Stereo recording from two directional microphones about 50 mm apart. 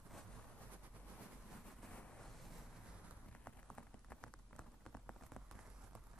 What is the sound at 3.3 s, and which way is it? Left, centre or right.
Rain on surface, left.